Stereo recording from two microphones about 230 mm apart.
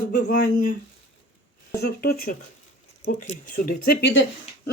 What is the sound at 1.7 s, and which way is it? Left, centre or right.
Speech, left.